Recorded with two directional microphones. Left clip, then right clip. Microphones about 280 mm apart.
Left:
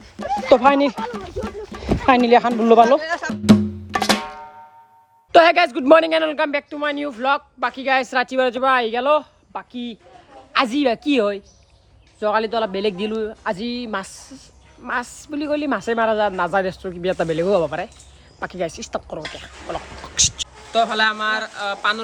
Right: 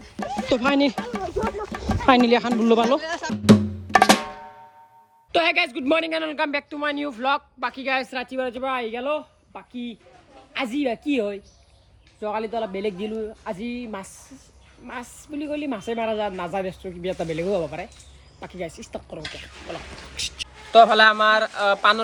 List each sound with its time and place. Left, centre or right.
0.0 s a sound: centre
3.9 s drum: centre
5.3 s a man's voice: centre
17.1 s speech: left
18.8 s a man's voice: centre
19.2 s speech: left
20.1 s speech: centre
20.7 s a man's voice: centre